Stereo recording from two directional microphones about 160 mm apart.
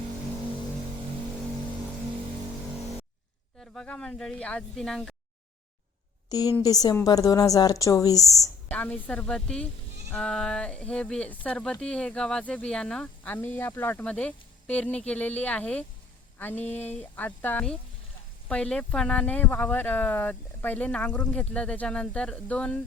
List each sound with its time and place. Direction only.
3.6 s speech: 5° left (ahead or behind)
6.2 s a woman's voice: 25° left (ahead or behind)
8.7 s speech: 5° left (ahead or behind)